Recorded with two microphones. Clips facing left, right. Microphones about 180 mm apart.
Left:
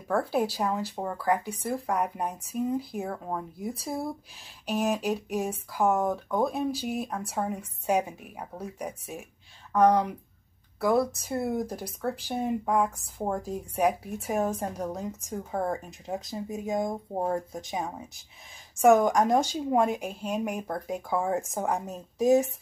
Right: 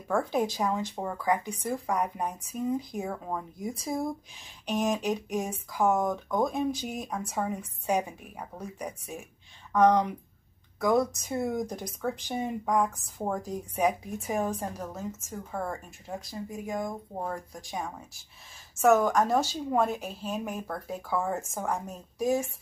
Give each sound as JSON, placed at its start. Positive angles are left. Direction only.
{"t": 0.1, "sound": "a woman's voice", "side_deg": 5}